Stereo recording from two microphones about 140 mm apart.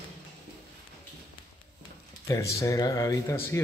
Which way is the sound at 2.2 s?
20° left (ahead or behind).